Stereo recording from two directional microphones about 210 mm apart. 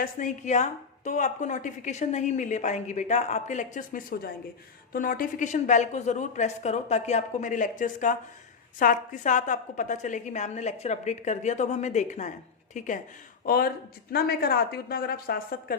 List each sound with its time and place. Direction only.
0.0 s a woman's voice: 35° left (ahead or behind)